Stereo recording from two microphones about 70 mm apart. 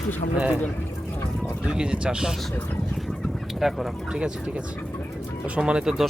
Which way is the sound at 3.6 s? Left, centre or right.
Centre.